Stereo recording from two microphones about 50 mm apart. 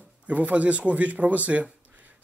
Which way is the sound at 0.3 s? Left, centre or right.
Right.